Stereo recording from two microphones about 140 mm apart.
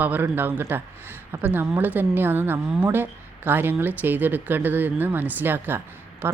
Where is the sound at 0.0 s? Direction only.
15° right (ahead or behind).